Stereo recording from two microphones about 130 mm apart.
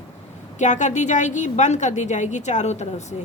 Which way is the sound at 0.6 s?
70° left (ahead or behind).